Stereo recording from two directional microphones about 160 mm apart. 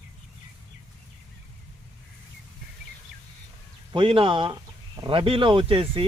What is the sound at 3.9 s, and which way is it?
Speech, 30° right (ahead or behind).